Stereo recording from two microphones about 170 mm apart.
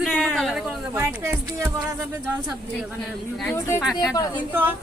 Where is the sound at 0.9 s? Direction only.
20° right (ahead or behind).